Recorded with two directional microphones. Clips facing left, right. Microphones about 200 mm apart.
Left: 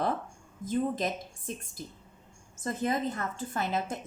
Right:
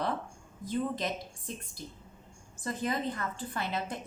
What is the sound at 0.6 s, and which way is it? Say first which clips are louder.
Speech: left 3 dB; 45° left (ahead or behind).